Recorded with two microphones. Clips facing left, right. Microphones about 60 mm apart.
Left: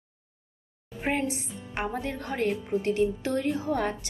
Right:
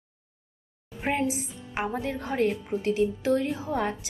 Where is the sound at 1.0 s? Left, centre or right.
Centre.